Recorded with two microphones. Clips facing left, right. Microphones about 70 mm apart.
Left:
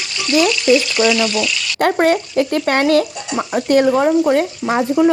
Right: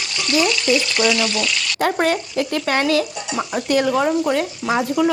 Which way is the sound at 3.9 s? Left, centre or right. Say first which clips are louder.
Left 4 dB; left.